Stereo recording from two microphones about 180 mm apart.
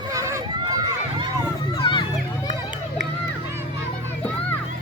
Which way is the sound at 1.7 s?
25° left (ahead or behind).